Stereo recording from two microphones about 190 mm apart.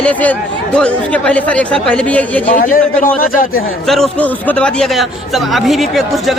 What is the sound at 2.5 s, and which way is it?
Speech, 45° left (ahead or behind).